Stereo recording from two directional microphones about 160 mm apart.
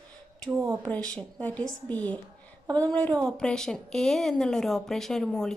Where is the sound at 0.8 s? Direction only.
5° left (ahead or behind).